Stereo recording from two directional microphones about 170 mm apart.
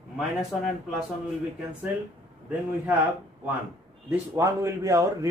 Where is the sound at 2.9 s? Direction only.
10° right (ahead or behind).